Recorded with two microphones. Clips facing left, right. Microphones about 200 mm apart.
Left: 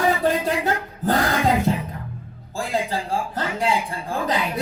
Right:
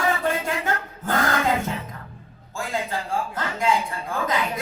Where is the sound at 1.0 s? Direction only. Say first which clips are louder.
Left 3 dB; 35° left (ahead or behind).